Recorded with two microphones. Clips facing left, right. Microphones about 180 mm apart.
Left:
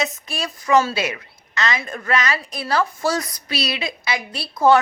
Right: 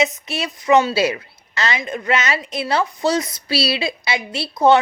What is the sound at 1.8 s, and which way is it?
A woman's voice, 20° right (ahead or behind).